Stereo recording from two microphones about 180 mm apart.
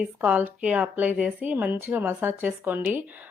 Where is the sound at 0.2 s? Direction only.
10° right (ahead or behind).